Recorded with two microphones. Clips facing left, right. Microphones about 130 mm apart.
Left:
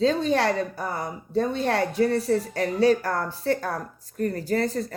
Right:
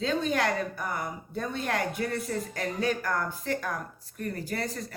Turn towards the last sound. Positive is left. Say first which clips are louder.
# left 8 dB
turn(degrees=35)  # may be behind; listen again after turning